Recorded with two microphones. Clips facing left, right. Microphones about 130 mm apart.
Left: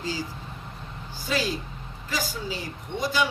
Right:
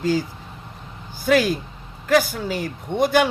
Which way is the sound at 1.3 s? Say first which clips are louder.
Right 10 dB; 60° right (ahead or behind).